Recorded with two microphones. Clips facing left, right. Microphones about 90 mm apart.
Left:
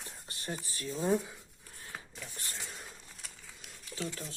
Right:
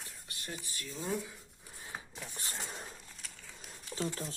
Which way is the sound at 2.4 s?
20° right (ahead or behind).